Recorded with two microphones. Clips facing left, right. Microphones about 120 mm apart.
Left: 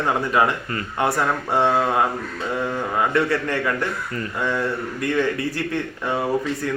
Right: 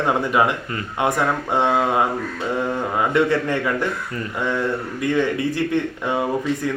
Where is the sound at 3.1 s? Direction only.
15° right (ahead or behind).